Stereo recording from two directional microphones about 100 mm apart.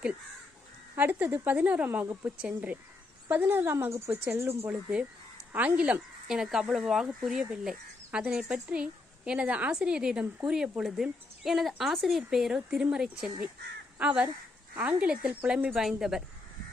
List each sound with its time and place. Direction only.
0.9 s a woman's voice: 20° right (ahead or behind)
4.6 s a woman's voice: 10° right (ahead or behind)